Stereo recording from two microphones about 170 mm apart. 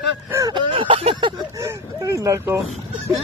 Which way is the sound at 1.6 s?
20° right (ahead or behind).